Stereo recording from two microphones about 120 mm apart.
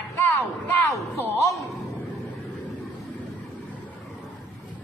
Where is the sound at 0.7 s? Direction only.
15° left (ahead or behind).